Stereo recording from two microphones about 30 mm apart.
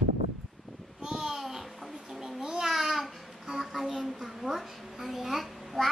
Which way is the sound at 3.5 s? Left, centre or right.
Centre.